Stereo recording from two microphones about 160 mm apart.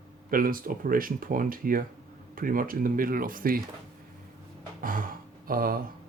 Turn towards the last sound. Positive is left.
turn(degrees=-65)  # may be behind; listen again after turning